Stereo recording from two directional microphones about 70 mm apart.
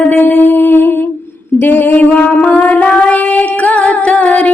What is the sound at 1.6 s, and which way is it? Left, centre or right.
Female singing, left.